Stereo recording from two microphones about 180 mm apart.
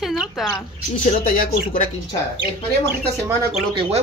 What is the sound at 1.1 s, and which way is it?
Speech, 50° left (ahead or behind).